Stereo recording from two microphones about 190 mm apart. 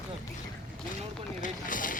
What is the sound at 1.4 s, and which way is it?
Boat, 45° left (ahead or behind).